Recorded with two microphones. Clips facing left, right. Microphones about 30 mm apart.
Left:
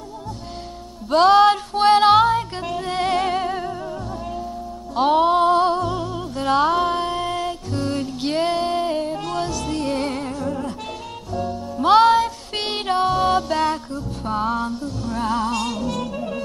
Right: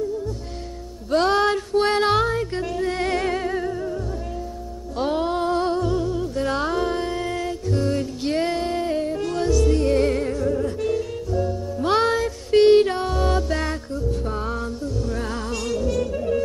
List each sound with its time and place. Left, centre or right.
1.1 s music: left
4.9 s music: left; by 10.7 s centre
10.8 s music: left
15.0 s music: left